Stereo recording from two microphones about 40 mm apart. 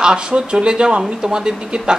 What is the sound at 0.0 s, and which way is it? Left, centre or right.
A man's voice, right.